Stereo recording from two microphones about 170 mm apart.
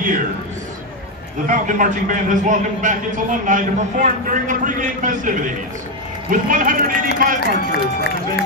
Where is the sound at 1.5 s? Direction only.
50° right (ahead or behind).